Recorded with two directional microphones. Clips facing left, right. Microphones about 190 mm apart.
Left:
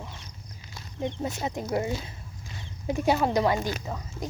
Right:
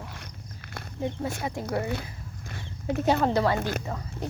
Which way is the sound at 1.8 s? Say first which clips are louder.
Even; 60° right (ahead or behind).